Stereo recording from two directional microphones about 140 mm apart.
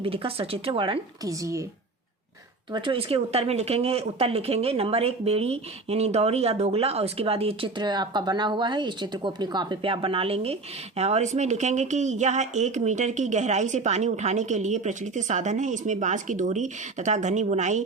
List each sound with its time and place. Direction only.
0.0 s speech: 40° right (ahead or behind)
1.2 s speech: 25° right (ahead or behind)
2.7 s speech: 40° right (ahead or behind); by 17.8 s 60° right (ahead or behind)